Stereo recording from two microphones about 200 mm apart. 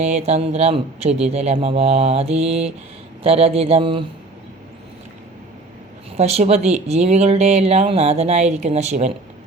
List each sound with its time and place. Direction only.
0.0 s speech: 35° right (ahead or behind)
6.1 s speech: 30° right (ahead or behind)